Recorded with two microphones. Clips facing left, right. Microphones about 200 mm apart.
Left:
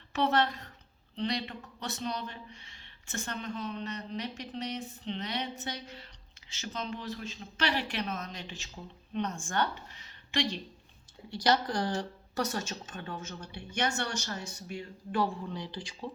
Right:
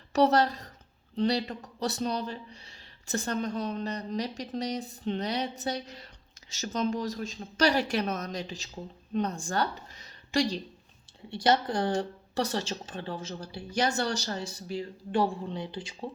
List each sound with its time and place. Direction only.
0.1 s a woman's voice: 40° right (ahead or behind)
11.3 s a man's voice: 25° right (ahead or behind)